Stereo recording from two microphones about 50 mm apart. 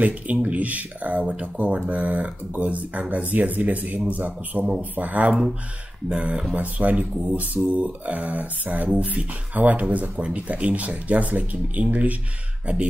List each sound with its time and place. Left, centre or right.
0.0 s a man's voice: right
6.0 s speech: centre
6.5 s speech: right